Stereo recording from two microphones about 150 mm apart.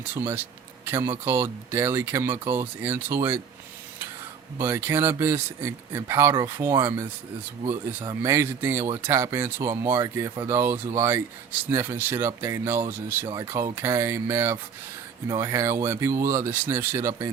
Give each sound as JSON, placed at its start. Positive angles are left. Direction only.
{"t": 0.0, "sound": "speech", "side_deg": -15}
{"t": 4.5, "sound": "speech", "side_deg": -15}